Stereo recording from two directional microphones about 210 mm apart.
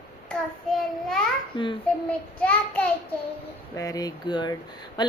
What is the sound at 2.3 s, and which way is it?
A woman's voice, 5° left (ahead or behind).